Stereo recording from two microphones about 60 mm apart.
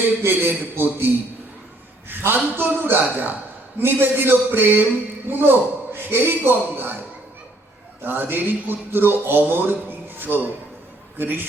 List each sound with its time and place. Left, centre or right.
0.3 s speech: right
8.0 s speech: right